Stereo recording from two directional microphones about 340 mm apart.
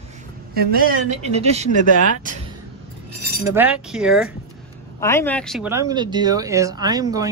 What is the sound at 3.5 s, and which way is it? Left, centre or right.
Speech, centre.